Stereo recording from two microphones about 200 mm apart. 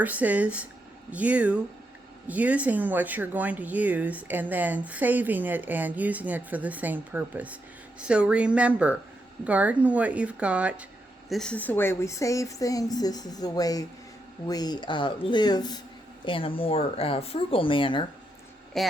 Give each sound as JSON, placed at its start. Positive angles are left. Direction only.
{"t": 0.0, "sound": "speech", "side_deg": -10}
{"t": 18.8, "sound": "speech", "side_deg": 0}